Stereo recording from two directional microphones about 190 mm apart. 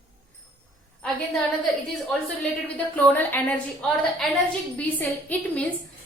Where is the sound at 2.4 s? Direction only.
5° left (ahead or behind).